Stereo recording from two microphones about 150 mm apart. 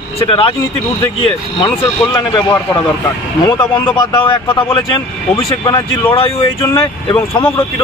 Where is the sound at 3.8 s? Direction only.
30° left (ahead or behind).